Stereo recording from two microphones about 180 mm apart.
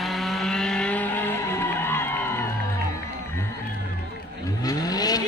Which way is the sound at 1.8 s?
10° left (ahead or behind).